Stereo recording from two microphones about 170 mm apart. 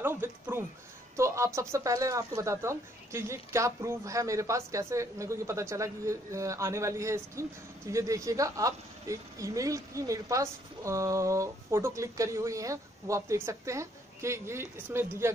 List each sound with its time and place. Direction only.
0.0 s speech: 15° right (ahead or behind)